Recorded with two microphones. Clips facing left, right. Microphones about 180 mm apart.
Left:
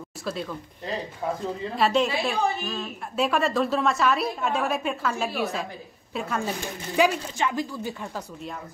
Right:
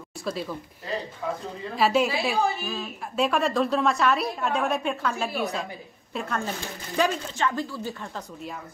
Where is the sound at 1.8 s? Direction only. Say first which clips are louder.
Right 1 dB; centre (ahead or behind).